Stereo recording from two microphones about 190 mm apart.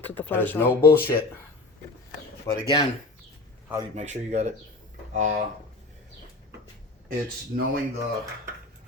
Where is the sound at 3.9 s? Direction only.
35° right (ahead or behind).